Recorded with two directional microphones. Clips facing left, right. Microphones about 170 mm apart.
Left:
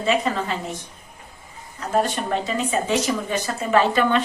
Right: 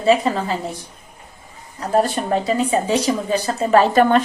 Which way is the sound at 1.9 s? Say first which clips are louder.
Right 4 dB; 35° right (ahead or behind).